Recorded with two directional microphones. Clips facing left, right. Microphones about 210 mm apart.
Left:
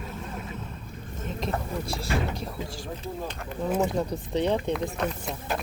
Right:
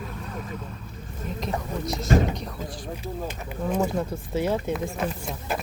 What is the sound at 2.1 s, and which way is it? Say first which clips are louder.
Speech: right 8 dB; 35° right (ahead or behind).